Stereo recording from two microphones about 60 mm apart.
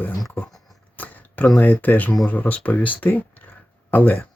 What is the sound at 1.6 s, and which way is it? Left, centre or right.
Speech, left.